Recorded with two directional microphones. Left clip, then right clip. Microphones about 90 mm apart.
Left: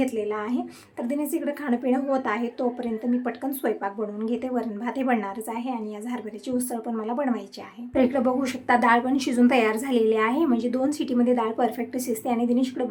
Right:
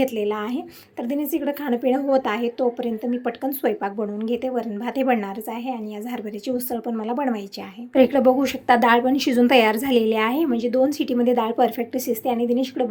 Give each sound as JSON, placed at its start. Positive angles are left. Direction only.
{"t": 0.0, "sound": "a woman's voice", "side_deg": -40}
{"t": 1.0, "sound": "a woman's voice", "side_deg": -25}
{"t": 6.8, "sound": "a woman's voice", "side_deg": -30}